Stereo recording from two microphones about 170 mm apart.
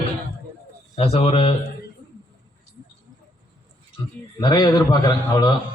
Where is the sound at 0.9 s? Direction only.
35° left (ahead or behind).